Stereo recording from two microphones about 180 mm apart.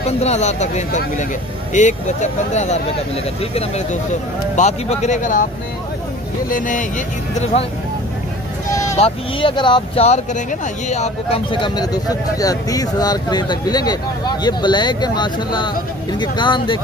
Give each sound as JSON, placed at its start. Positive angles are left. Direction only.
{"t": 0.2, "sound": "speech", "side_deg": 40}
{"t": 6.5, "sound": "speech", "side_deg": 45}
{"t": 8.9, "sound": "speech", "side_deg": 30}